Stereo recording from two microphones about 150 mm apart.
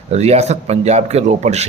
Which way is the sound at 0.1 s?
45° right (ahead or behind).